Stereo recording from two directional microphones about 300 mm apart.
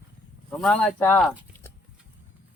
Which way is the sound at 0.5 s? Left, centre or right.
Centre.